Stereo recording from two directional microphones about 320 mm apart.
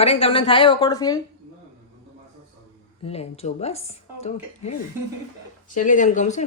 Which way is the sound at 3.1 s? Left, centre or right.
Centre.